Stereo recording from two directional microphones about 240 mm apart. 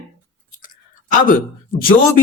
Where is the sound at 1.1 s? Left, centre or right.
Left.